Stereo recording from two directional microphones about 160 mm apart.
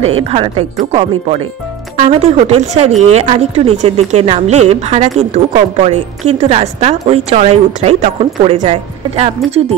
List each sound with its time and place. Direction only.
0.0 s speech: 40° right (ahead or behind)